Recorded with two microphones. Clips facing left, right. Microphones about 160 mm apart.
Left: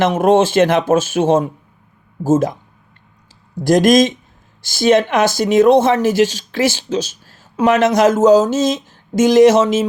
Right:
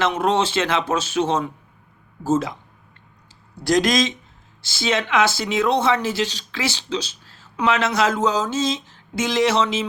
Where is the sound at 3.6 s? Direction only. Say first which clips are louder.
Left 8 dB; 50° left (ahead or behind).